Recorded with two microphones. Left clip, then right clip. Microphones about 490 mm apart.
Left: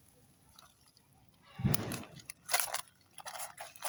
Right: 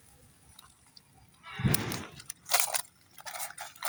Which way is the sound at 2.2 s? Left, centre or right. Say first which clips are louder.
Right 5 dB; left.